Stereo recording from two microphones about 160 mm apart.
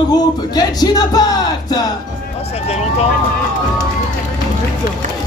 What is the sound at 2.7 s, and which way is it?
Speech, 40° left (ahead or behind).